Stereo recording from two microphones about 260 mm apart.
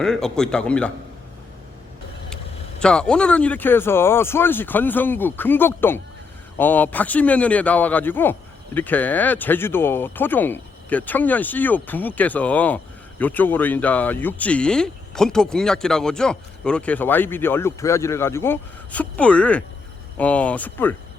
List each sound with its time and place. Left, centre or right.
0.0 s speech: centre
2.8 s speech: centre